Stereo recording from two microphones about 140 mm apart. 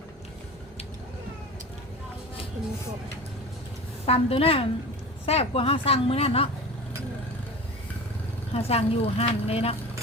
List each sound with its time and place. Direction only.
4.0 s a woman's voice: 45° left (ahead or behind)
8.5 s a woman's voice: 45° left (ahead or behind)